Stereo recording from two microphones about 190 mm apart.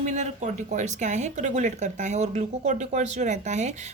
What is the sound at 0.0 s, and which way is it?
Speech, 40° right (ahead or behind).